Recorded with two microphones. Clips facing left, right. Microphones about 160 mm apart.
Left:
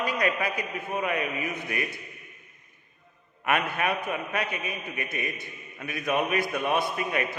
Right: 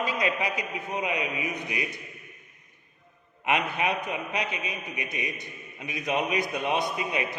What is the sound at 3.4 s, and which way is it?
A man's voice, 20° right (ahead or behind).